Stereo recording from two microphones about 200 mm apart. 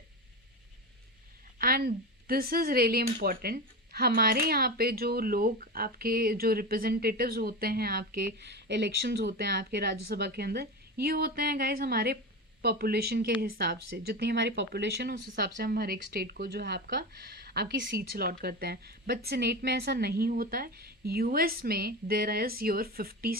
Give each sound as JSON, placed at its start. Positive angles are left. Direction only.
{"t": 1.5, "sound": "a woman's voice", "side_deg": -45}